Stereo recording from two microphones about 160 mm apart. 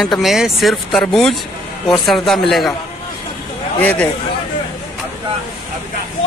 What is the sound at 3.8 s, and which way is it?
Speech, 10° left (ahead or behind).